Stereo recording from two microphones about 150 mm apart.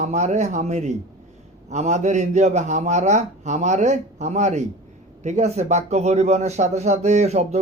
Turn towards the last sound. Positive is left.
turn(degrees=-45)  # may be behind; listen again after turning